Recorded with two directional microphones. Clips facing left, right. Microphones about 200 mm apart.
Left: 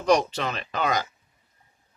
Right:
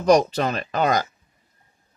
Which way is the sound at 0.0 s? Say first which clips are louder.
Right 5 dB; 40° right (ahead or behind).